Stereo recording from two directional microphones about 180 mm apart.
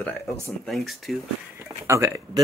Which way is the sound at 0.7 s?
Centre (ahead or behind).